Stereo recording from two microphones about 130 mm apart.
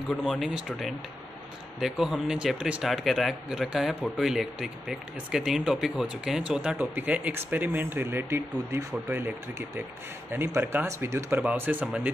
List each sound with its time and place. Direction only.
0.1 s speech: centre (ahead or behind); by 8.8 s 15° right (ahead or behind)
10.3 s speech: 15° right (ahead or behind)